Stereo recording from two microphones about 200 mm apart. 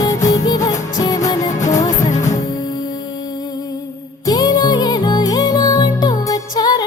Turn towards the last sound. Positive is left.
turn(degrees=20)  # may be behind; listen again after turning